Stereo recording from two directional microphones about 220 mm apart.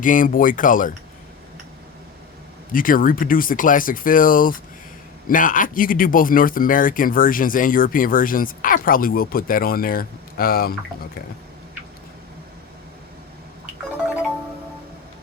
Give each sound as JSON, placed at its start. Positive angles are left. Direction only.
{"t": 0.0, "sound": "speech", "side_deg": 40}
{"t": 2.7, "sound": "speech", "side_deg": 40}